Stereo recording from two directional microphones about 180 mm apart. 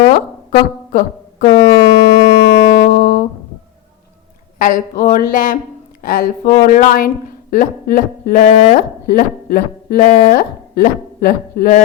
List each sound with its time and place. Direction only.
0.1 s a sound: 55° left (ahead or behind)
1.5 s wind instrument: 20° left (ahead or behind)
2.5 s music: 55° left (ahead or behind)
4.5 s speech: 50° left (ahead or behind)
8.4 s speech: 40° left (ahead or behind)
9.0 s speech: 55° left (ahead or behind)
10.1 s speech: 35° left (ahead or behind)
10.3 s speech: 55° left (ahead or behind)